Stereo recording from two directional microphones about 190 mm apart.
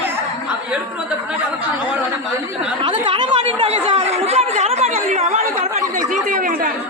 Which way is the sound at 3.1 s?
25° right (ahead or behind).